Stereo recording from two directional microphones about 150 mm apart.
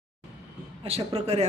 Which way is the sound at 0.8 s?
40° right (ahead or behind).